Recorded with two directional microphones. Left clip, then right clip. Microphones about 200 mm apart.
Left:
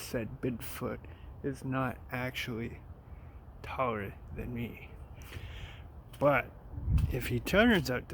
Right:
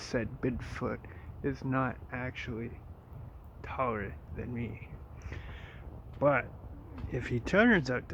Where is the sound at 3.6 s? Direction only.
15° left (ahead or behind).